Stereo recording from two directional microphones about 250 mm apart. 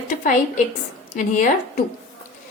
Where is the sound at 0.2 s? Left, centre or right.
Left.